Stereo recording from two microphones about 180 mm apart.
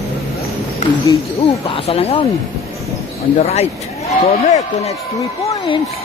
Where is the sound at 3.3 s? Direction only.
35° left (ahead or behind).